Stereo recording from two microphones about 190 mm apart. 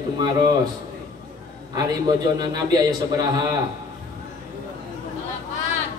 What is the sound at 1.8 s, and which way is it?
A man's voice, 20° right (ahead or behind).